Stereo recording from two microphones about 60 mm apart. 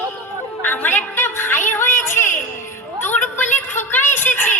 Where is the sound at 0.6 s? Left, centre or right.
Left.